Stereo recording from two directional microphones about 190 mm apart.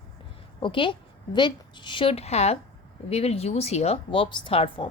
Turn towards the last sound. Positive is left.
turn(degrees=30)  # may be behind; listen again after turning